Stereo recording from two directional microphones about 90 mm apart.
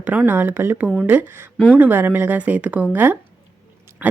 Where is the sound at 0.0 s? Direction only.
20° right (ahead or behind).